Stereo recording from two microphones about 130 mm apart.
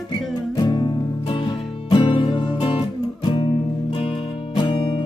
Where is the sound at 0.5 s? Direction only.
35° left (ahead or behind).